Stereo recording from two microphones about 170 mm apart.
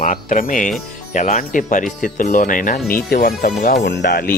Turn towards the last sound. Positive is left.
turn(degrees=70)  # may be behind; listen again after turning